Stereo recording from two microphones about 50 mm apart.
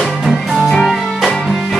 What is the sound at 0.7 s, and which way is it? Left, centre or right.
Music, centre.